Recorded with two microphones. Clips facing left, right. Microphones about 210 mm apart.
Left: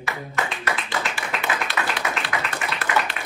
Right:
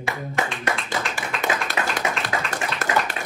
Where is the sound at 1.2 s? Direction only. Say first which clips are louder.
Right 1 dB; 45° right (ahead or behind).